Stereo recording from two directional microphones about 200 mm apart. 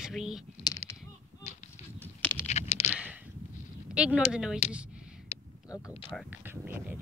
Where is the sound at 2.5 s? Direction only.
35° left (ahead or behind).